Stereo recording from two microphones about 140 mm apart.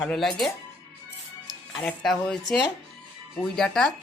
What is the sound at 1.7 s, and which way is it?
Speech, centre (ahead or behind).